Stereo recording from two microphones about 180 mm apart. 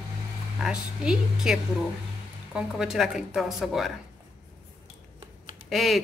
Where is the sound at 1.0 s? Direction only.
5° right (ahead or behind).